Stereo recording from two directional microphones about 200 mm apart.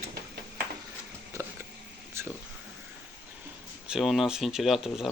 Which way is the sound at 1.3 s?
15° right (ahead or behind).